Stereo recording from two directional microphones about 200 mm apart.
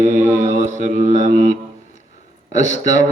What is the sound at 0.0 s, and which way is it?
Mantra, 35° right (ahead or behind).